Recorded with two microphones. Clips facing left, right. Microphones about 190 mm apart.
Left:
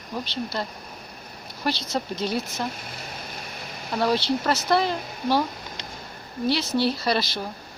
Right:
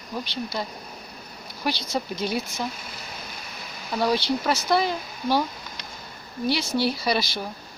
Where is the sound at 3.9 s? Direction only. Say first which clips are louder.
Even; centre (ahead or behind).